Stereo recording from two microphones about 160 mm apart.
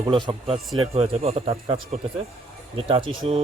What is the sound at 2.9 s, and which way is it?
Speech, 30° right (ahead or behind).